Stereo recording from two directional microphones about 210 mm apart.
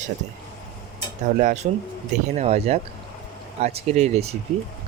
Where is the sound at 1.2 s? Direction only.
35° right (ahead or behind).